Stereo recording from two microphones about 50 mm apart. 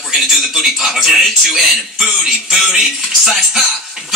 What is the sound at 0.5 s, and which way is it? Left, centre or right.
Speech, centre.